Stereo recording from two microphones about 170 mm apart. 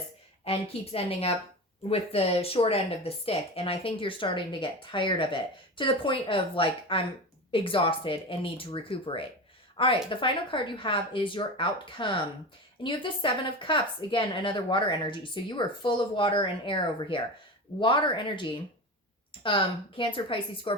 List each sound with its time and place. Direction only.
0.4 s a woman's voice: 35° left (ahead or behind)